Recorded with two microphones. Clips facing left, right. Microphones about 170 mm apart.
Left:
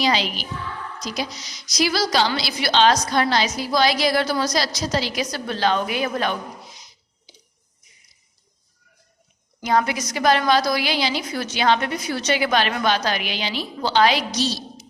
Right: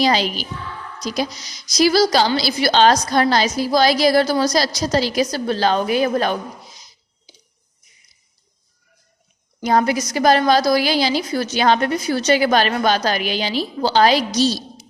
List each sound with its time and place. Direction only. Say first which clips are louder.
0.0 s a woman's voice: right 4 dB; 40° right (ahead or behind)
9.6 s a woman's voice: right 4 dB; 40° right (ahead or behind)